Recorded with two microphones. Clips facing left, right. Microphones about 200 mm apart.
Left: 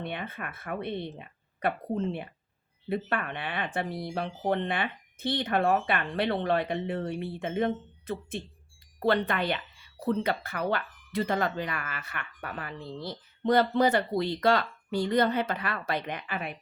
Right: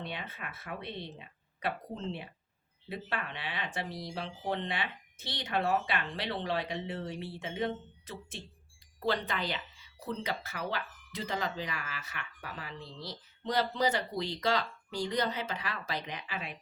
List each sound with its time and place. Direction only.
0.0 s speech: 55° left (ahead or behind)